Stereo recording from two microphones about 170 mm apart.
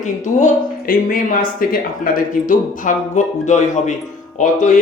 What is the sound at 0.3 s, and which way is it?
Speech, 50° left (ahead or behind).